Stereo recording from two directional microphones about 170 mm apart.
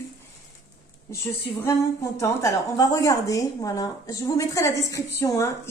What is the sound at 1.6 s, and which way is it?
A woman's voice, 15° left (ahead or behind).